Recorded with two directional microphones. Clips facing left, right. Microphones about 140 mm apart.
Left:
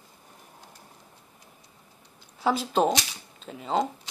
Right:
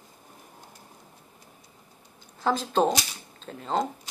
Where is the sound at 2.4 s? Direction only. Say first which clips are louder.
Even; 10° left (ahead or behind).